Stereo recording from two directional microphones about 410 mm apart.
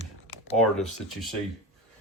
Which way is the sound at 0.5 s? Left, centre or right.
Centre.